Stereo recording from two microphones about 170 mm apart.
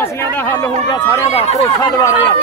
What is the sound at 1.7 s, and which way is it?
Speech, 20° left (ahead or behind).